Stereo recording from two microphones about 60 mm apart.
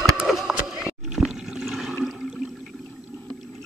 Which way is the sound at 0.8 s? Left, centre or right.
Centre.